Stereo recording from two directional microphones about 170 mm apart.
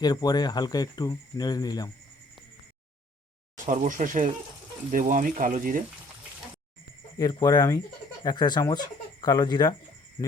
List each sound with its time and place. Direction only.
0.0 s speech: 25° left (ahead or behind)
3.7 s speech: 50° right (ahead or behind)
7.2 s speech: 25° left (ahead or behind)